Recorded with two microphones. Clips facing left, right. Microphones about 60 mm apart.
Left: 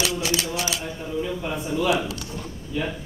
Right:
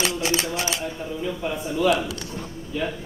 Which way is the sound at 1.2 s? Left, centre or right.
Centre.